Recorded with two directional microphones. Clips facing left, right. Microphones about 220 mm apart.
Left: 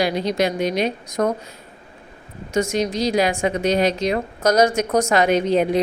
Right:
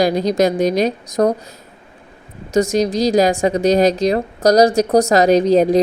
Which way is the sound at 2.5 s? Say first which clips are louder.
Right 5 dB; 35° right (ahead or behind).